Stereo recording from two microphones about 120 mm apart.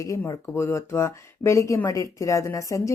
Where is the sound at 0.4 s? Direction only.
20° left (ahead or behind).